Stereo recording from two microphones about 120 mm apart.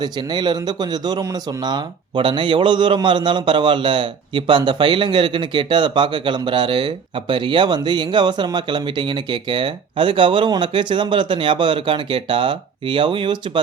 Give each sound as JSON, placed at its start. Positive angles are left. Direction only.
{"t": 0.0, "sound": "a man's voice", "side_deg": -40}